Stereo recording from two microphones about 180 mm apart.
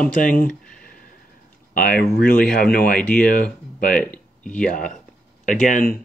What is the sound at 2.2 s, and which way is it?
Speech, 55° left (ahead or behind).